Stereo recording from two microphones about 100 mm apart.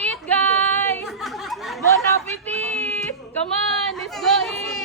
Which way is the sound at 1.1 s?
Centre (ahead or behind).